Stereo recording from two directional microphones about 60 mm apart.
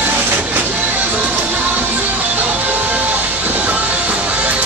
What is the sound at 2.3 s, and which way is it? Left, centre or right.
Music, right.